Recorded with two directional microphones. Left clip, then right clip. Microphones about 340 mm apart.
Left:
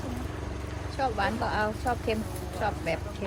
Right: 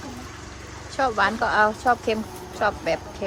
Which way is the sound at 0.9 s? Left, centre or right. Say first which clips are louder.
Right 7 dB; right.